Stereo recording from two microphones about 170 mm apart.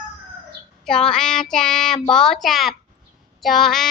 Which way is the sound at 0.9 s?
5° left (ahead or behind).